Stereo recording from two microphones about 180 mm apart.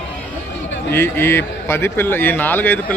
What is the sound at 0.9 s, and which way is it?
A man's voice, 10° left (ahead or behind).